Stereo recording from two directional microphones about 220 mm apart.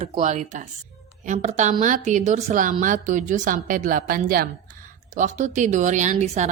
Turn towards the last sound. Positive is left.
turn(degrees=-30)  # may be behind; listen again after turning